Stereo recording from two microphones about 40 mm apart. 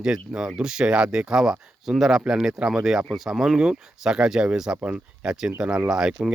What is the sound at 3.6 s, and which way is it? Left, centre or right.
Speech, centre.